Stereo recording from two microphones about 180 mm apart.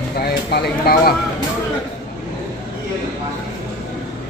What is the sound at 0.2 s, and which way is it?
Speech, 60° left (ahead or behind).